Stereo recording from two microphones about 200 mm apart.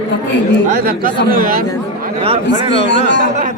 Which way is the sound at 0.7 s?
45° right (ahead or behind).